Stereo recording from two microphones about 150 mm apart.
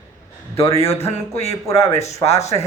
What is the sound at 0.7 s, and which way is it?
Music, 20° left (ahead or behind).